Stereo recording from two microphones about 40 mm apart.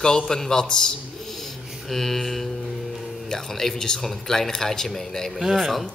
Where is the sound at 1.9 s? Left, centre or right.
Centre.